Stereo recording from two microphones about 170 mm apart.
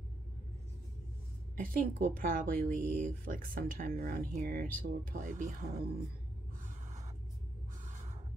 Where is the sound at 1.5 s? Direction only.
55° right (ahead or behind).